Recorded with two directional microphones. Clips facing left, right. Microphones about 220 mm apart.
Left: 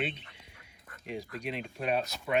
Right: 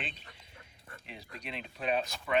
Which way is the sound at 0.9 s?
30° right (ahead or behind).